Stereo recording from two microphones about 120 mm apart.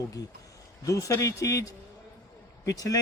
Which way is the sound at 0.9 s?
30° left (ahead or behind).